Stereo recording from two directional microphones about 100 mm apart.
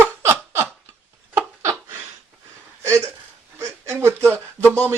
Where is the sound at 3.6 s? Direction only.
25° right (ahead or behind).